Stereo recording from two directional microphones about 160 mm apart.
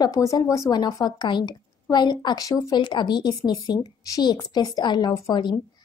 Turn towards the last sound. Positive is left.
turn(degrees=25)  # may be behind; listen again after turning